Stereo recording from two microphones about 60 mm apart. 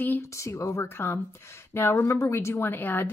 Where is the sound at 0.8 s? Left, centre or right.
Left.